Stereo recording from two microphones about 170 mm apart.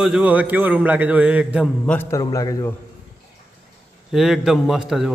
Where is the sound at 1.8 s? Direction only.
10° left (ahead or behind).